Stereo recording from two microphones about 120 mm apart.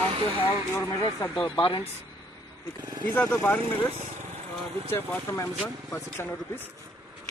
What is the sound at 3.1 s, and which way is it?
Speech, 15° left (ahead or behind).